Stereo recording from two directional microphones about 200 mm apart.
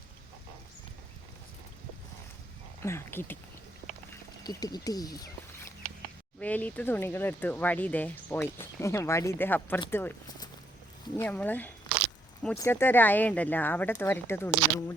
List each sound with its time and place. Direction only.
2.8 s speech: 10° left (ahead or behind)
6.4 s speech: 5° left (ahead or behind)
9.9 s a sound: 10° left (ahead or behind)
11.2 s speech: 10° left (ahead or behind)